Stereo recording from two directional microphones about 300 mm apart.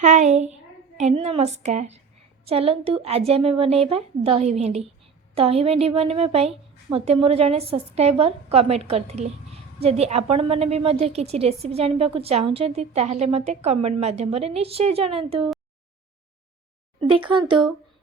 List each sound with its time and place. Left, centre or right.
0.0 s a woman's voice: right